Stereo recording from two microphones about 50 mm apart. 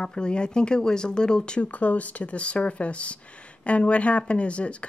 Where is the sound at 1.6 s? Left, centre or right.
Left.